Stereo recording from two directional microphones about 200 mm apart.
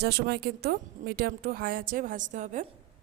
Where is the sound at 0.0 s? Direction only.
55° right (ahead or behind); by 2.6 s 40° right (ahead or behind).